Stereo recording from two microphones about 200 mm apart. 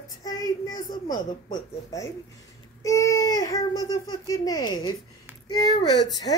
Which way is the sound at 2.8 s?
15° left (ahead or behind).